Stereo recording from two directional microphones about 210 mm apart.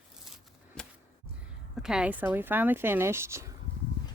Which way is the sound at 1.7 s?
Centre (ahead or behind).